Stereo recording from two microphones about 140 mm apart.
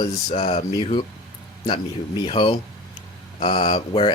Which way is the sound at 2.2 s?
40° left (ahead or behind).